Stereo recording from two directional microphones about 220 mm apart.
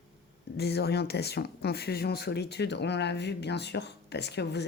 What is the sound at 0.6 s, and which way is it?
Speech, 45° left (ahead or behind).